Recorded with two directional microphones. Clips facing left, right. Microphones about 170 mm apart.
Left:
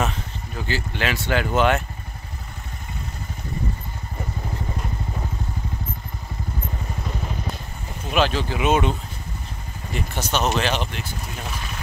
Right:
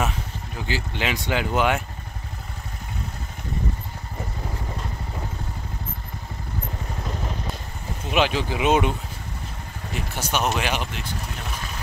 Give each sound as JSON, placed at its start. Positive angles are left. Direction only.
{"t": 0.6, "sound": "speech", "side_deg": -15}
{"t": 8.1, "sound": "speech", "side_deg": -15}
{"t": 9.9, "sound": "speech", "side_deg": -10}